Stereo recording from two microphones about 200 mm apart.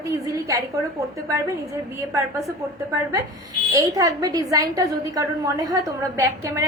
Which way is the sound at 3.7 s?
15° right (ahead or behind).